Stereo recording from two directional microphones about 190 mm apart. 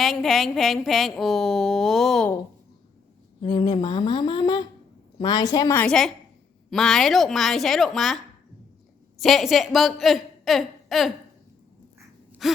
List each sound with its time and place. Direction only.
0.0 s speech: centre (ahead or behind)
3.4 s speech: 25° left (ahead or behind)
5.8 s a woman's voice: centre (ahead or behind)
12.4 s gasp: centre (ahead or behind)